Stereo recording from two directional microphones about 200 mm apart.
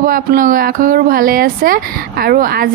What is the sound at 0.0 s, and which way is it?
Speech, 45° right (ahead or behind).